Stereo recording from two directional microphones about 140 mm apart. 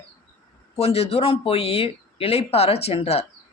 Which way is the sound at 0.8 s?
45° left (ahead or behind).